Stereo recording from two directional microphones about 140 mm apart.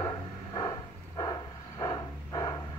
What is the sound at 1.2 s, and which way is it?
Vehicle, 25° left (ahead or behind).